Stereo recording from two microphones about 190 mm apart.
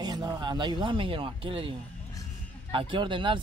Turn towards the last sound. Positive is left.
turn(degrees=-25)  # may be behind; listen again after turning